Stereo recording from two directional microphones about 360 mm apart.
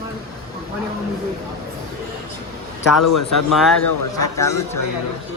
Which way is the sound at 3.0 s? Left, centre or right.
Left.